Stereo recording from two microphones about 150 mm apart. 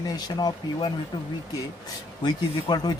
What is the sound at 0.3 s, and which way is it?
Speech, 30° left (ahead or behind).